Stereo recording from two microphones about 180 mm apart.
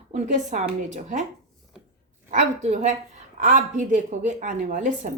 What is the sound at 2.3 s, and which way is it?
A woman's voice, 40° right (ahead or behind).